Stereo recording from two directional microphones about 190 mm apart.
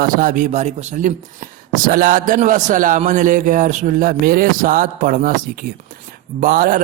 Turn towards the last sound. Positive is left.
turn(degrees=-50)  # may be behind; listen again after turning